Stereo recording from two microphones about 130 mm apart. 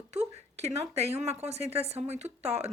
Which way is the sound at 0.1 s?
55° right (ahead or behind).